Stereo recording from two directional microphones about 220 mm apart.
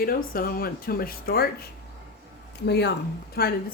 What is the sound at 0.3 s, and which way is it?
A woman's voice, 40° left (ahead or behind).